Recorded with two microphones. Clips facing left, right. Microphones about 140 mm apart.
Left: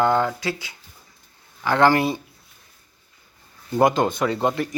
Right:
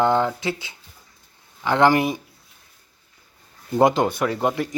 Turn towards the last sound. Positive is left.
turn(degrees=-10)  # may be behind; listen again after turning